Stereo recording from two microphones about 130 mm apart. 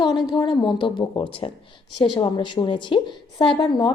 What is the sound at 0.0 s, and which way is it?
A woman's voice, 35° left (ahead or behind).